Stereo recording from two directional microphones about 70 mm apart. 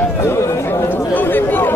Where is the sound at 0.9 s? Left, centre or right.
Left.